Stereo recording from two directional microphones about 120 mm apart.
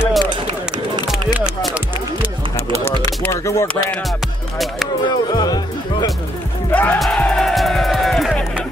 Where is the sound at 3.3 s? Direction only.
25° left (ahead or behind).